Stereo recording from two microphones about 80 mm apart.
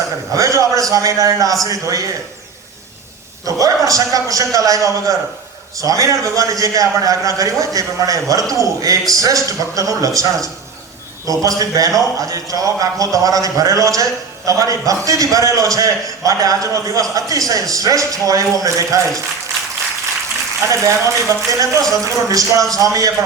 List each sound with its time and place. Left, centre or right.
0.3 s a man's voice: right
3.4 s a man's voice: right
20.7 s a man's voice: right